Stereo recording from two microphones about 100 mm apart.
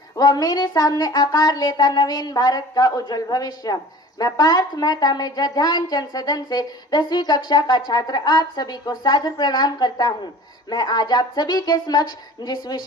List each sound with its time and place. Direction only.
0.2 s a woman's voice: 40° left (ahead or behind)